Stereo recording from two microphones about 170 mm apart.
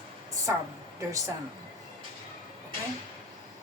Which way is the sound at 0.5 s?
15° right (ahead or behind).